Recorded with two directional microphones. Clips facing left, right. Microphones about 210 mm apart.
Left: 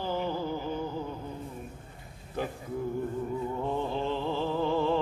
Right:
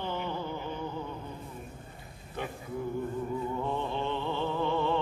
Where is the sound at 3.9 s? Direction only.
35° left (ahead or behind).